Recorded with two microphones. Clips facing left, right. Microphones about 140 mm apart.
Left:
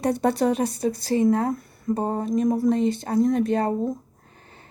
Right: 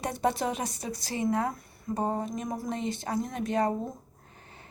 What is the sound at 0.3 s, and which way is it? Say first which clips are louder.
A woman's voice: left 9 dB; 35° left (ahead or behind).